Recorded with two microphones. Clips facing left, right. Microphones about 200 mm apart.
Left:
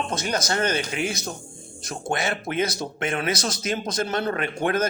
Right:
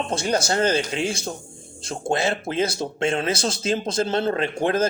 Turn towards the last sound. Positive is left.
turn(degrees=-30)  # may be behind; listen again after turning